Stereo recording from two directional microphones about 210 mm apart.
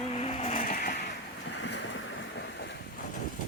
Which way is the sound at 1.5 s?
60° left (ahead or behind).